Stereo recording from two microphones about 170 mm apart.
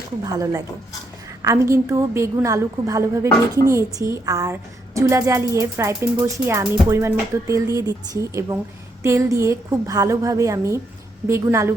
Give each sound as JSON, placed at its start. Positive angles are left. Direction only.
{"t": 0.3, "sound": "a woman's voice", "side_deg": -20}